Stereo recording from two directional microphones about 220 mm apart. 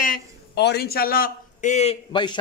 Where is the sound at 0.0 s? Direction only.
45° left (ahead or behind).